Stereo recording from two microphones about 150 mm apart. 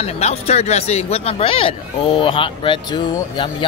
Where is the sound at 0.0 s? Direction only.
45° left (ahead or behind).